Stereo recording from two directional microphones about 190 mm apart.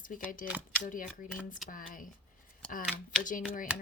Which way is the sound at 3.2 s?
45° left (ahead or behind).